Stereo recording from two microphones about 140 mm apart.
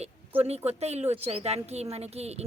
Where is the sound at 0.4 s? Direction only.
50° right (ahead or behind).